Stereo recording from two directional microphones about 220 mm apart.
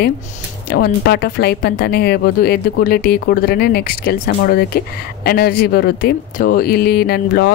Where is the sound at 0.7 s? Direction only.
45° left (ahead or behind).